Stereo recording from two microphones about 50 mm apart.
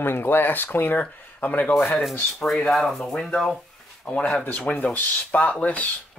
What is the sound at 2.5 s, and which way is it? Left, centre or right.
Speech, centre.